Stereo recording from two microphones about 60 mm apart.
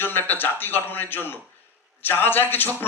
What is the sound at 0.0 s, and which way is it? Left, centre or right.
A man's voice, left.